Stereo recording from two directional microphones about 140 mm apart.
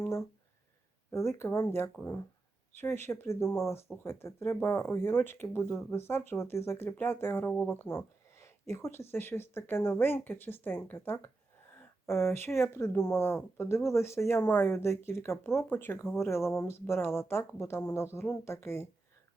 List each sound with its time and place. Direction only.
0.0 s speech: 20° left (ahead or behind)